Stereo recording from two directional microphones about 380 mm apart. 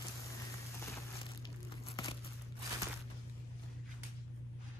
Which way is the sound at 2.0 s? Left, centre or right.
Centre.